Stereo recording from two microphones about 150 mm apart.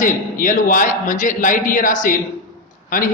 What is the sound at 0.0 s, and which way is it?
A man's voice, 65° left (ahead or behind).